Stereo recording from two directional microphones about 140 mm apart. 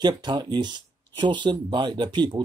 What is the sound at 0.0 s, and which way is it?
Speech, 30° right (ahead or behind).